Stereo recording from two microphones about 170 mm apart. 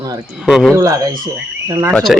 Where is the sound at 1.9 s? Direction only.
Centre (ahead or behind).